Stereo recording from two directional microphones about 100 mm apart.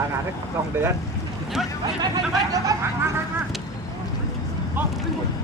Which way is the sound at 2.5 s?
35° right (ahead or behind).